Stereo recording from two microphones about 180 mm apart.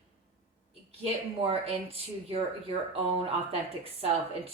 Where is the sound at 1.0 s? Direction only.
30° right (ahead or behind).